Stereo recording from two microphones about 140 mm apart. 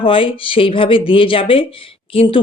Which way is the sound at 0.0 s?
40° left (ahead or behind).